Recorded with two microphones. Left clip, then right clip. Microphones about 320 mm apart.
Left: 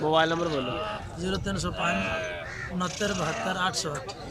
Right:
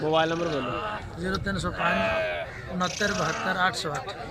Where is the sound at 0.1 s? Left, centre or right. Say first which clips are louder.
Even; centre.